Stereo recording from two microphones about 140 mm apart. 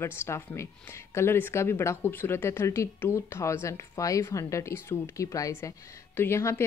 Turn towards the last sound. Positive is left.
turn(degrees=20)  # may be behind; listen again after turning